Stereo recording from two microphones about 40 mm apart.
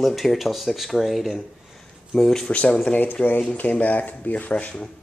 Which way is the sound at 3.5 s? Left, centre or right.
Left.